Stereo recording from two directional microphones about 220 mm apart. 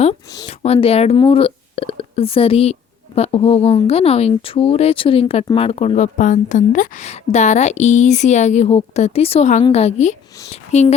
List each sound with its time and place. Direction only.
0.4 s speech: 30° left (ahead or behind)